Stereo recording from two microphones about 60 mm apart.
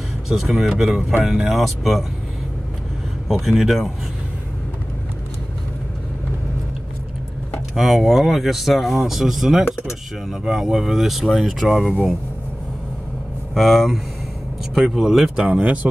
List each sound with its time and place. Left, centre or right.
0.3 s speech: centre
3.3 s speech: centre
7.7 s speech: centre
13.6 s speech: centre
15.4 s speech: centre